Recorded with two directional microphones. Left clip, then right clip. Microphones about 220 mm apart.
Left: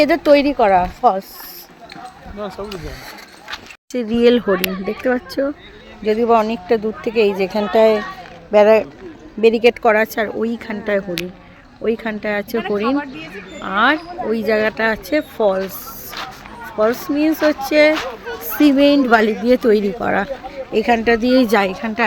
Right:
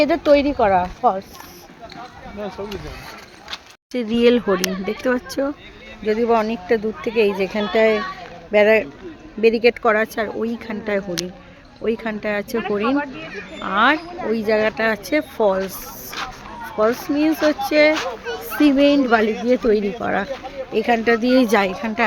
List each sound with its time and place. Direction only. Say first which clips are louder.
0.0 s speech: left 3 dB; 15° left (ahead or behind)
3.5 s speech: left 2 dB; 10° left (ahead or behind)
17.0 s a woman's voice: left 2 dB; 10° left (ahead or behind)